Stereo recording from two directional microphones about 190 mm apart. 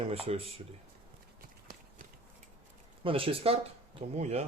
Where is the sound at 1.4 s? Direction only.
45° right (ahead or behind).